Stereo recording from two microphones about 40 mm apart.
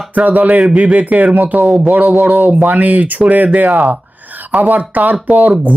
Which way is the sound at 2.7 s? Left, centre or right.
Right.